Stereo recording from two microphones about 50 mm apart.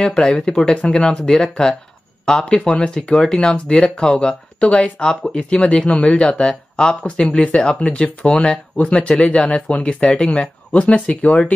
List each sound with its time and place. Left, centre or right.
0.0 s speech: centre
4.6 s speech: left
9.7 s speech: left